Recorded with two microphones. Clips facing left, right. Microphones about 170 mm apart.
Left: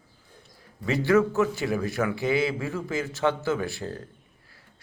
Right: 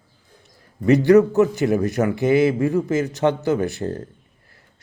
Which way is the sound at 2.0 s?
30° right (ahead or behind).